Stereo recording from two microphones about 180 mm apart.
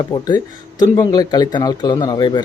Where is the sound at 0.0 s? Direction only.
20° left (ahead or behind).